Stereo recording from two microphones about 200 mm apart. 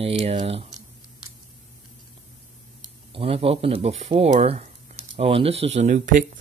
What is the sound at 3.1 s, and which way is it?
Speech, 30° right (ahead or behind).